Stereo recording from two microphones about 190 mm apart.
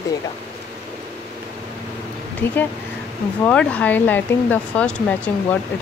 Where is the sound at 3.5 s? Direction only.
5° left (ahead or behind).